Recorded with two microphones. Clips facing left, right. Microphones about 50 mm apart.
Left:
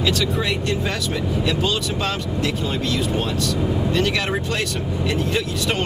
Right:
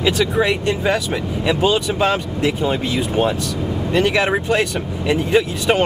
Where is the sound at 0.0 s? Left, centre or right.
Right.